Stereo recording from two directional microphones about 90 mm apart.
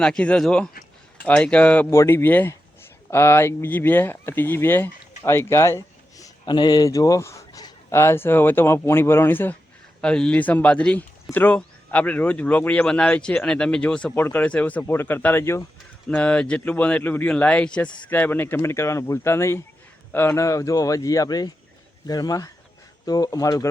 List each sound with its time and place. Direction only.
0.0 s speech: 10° left (ahead or behind)
1.9 s speech: 30° left (ahead or behind)
6.4 s speech: 55° left (ahead or behind); by 9.6 s 25° left (ahead or behind)
10.0 s speech: 10° left (ahead or behind); by 15.6 s 25° left (ahead or behind)
16.0 s speech: 15° left (ahead or behind); by 23.6 s 40° left (ahead or behind)